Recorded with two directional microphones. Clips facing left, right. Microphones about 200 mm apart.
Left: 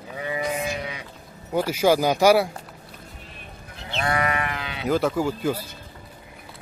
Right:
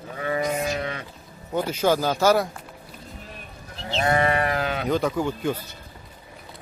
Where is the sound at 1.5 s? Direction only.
10° left (ahead or behind).